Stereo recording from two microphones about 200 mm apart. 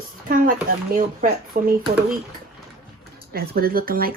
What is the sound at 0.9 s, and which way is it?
Speech, 45° right (ahead or behind).